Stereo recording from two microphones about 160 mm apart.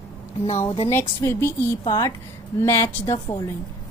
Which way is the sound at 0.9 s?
15° left (ahead or behind).